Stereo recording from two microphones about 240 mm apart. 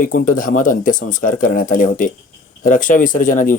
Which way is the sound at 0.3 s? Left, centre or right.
Left.